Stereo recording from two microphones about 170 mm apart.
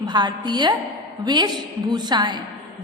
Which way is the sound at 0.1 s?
25° right (ahead or behind).